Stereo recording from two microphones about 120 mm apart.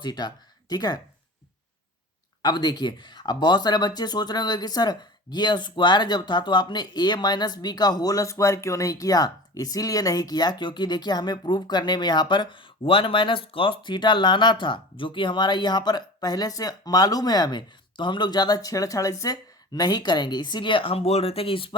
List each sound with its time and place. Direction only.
0.0 s speech: 35° left (ahead or behind)
2.4 s speech: 35° left (ahead or behind)